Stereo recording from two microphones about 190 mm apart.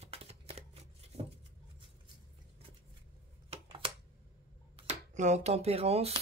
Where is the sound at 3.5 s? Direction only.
30° right (ahead or behind).